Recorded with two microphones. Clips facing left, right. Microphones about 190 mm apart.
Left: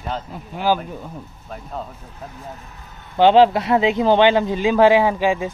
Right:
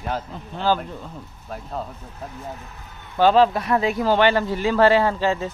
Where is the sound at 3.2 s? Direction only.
25° left (ahead or behind).